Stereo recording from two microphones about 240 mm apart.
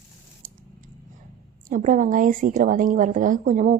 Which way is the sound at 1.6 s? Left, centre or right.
Right.